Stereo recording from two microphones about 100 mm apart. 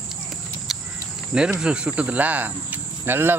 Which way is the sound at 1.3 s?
10° right (ahead or behind).